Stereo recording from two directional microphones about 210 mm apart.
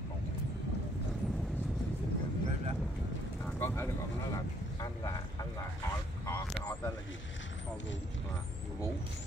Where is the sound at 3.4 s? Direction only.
10° left (ahead or behind).